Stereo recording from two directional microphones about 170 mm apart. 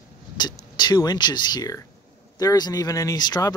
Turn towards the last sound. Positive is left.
turn(degrees=25)  # may be behind; listen again after turning